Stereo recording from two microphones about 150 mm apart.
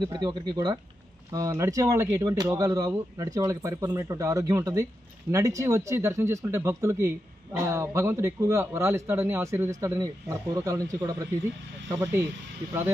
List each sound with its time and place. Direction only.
0.0 s speech: 30° right (ahead or behind); by 12.3 s 15° right (ahead or behind)